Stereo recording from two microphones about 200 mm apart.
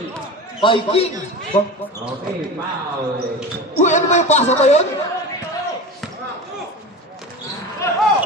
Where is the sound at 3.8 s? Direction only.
35° left (ahead or behind).